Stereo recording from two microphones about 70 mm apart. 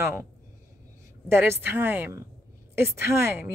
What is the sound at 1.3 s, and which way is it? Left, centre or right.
A woman's voice, right.